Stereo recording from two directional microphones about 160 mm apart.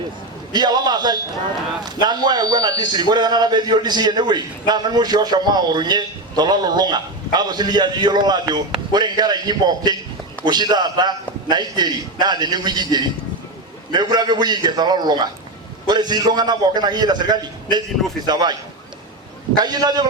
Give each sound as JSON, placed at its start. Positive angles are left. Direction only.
{"t": 0.5, "sound": "a man's voice", "side_deg": -25}
{"t": 19.5, "sound": "a man's voice", "side_deg": -25}